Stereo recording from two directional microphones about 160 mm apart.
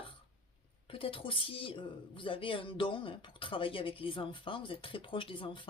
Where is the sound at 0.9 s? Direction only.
35° left (ahead or behind).